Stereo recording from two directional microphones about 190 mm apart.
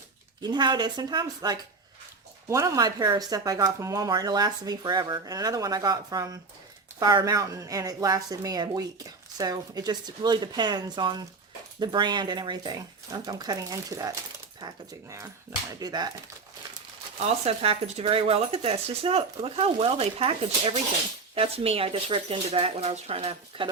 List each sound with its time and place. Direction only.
0.4 s speech: 20° right (ahead or behind)
17.2 s speech: 35° right (ahead or behind)